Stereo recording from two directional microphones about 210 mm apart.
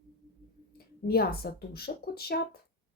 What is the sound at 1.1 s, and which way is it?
A woman's voice, 45° left (ahead or behind).